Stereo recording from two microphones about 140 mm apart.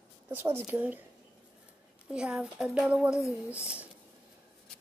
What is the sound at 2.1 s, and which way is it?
Speech, 5° right (ahead or behind).